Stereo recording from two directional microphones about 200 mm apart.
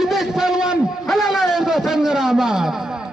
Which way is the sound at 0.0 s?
Centre (ahead or behind).